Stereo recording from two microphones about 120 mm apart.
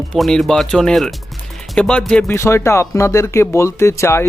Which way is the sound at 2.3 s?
20° left (ahead or behind).